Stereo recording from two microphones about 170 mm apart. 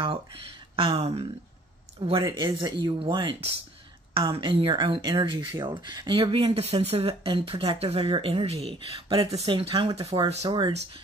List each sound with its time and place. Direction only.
0.7 s speech: 35° right (ahead or behind)